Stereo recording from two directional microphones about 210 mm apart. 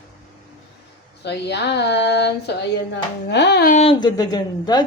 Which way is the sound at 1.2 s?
55° left (ahead or behind).